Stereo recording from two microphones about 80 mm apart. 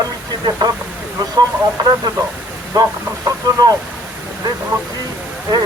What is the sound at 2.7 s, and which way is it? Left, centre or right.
Speech, right.